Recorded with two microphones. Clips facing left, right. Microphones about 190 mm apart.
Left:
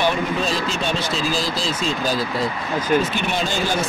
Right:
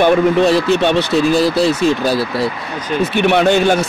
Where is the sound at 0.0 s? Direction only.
65° right (ahead or behind).